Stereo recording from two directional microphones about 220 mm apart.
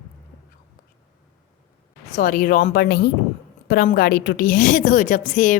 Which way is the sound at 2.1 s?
40° left (ahead or behind).